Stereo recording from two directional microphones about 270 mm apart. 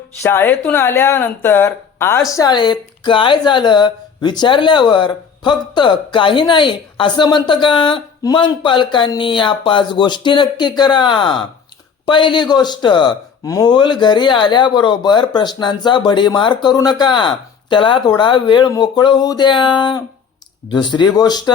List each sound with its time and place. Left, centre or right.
0.2 s speech: centre